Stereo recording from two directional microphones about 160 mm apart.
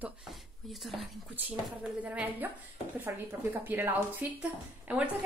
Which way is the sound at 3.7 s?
10° right (ahead or behind).